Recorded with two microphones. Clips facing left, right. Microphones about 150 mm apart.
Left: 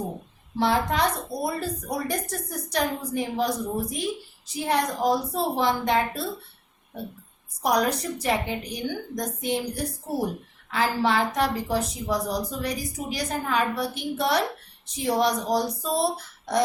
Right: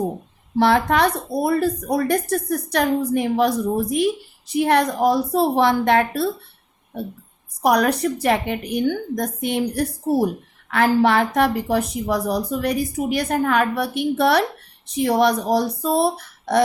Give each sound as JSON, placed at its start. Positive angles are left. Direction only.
{"t": 0.5, "sound": "a woman's voice", "side_deg": -65}
{"t": 7.6, "sound": "a woman's voice", "side_deg": -65}